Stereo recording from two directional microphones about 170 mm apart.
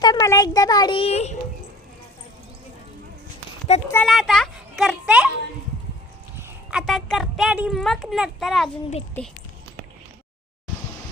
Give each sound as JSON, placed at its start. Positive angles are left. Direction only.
{"t": 0.0, "sound": "a child's voice", "side_deg": 20}
{"t": 3.7, "sound": "speech", "side_deg": 40}
{"t": 4.0, "sound": "speech", "side_deg": 0}
{"t": 6.4, "sound": "speech", "side_deg": -5}